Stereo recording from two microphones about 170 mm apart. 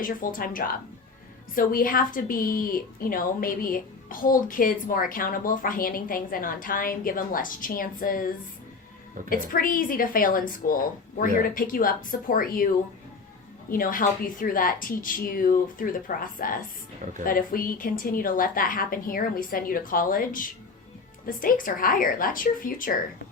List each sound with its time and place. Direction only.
0.0 s a woman's voice: 55° left (ahead or behind)
13.7 s a woman's voice: 55° left (ahead or behind)